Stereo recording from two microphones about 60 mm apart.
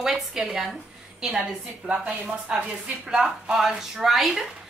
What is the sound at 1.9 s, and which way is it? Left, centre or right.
Speech, centre.